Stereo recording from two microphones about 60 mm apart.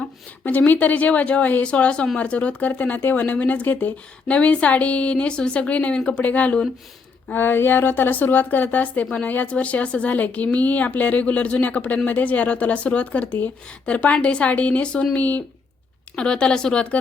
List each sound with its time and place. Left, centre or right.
0.4 s speech: left
4.3 s speech: left
7.3 s speech: left
16.1 s speech: centre